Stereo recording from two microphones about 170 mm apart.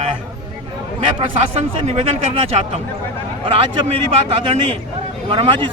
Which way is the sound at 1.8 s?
40° right (ahead or behind).